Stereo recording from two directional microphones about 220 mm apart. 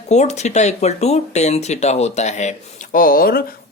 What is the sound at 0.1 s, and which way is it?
Speech, 30° left (ahead or behind).